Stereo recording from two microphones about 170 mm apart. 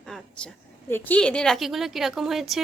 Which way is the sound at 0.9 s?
10° left (ahead or behind).